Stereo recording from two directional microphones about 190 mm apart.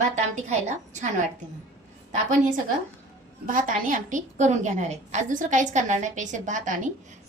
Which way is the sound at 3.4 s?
45° right (ahead or behind).